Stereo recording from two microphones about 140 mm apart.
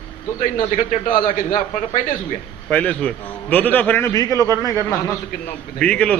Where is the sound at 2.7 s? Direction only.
10° left (ahead or behind).